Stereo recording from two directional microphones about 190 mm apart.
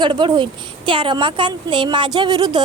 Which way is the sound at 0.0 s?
25° right (ahead or behind).